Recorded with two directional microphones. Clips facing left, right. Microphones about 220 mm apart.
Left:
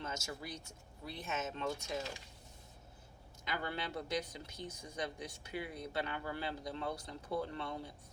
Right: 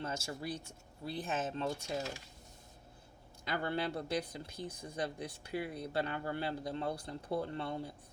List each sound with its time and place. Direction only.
0.0 s speech: 30° right (ahead or behind)
3.5 s speech: 30° right (ahead or behind)